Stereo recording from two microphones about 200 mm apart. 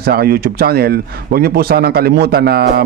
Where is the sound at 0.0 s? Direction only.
50° right (ahead or behind).